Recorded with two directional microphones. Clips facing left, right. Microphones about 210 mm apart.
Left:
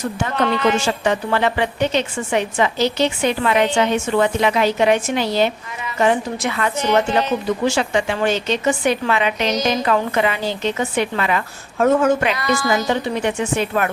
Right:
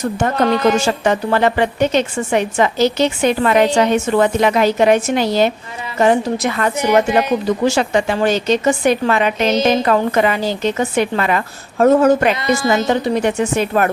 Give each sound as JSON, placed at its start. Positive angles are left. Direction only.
{"t": 0.2, "sound": "a woman's voice", "side_deg": -45}
{"t": 6.7, "sound": "speech", "side_deg": -10}
{"t": 7.6, "sound": "a woman's voice", "side_deg": -40}
{"t": 12.3, "sound": "speech", "side_deg": -25}
{"t": 12.9, "sound": "a woman's voice", "side_deg": -40}